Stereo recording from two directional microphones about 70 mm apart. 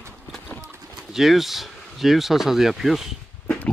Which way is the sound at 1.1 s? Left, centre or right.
Centre.